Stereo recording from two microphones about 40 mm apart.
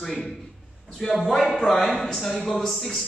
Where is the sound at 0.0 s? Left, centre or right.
Centre.